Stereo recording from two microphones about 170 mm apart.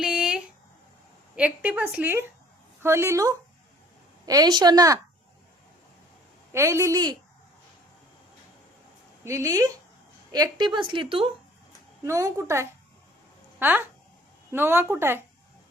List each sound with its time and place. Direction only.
0.0 s a sound: 5° right (ahead or behind)
1.4 s a woman's voice: 10° right (ahead or behind)
6.5 s a woman's voice: 15° right (ahead or behind)
9.2 s a woman's voice: 20° right (ahead or behind)
12.0 s a woman's voice: 20° right (ahead or behind)